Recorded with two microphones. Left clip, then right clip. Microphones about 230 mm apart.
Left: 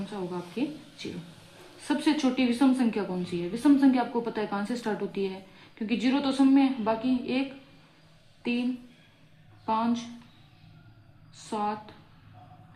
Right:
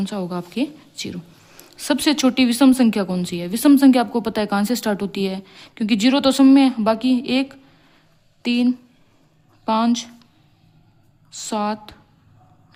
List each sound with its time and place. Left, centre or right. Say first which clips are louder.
0.0 s a woman's voice: right 8 dB; right
9.6 s a woman's voice: right 8 dB; right
11.3 s a woman's voice: right 7 dB; right